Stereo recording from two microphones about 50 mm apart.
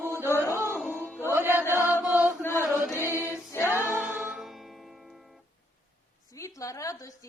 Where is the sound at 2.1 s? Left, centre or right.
Right.